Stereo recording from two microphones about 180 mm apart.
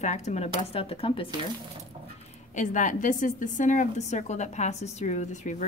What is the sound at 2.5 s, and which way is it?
A woman's voice, 45° left (ahead or behind).